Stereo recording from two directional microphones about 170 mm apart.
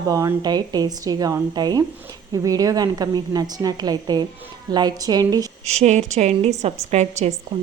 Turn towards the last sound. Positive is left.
turn(degrees=-25)  # may be behind; listen again after turning